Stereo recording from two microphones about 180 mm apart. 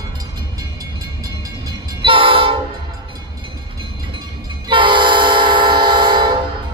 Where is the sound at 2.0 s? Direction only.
30° right (ahead or behind).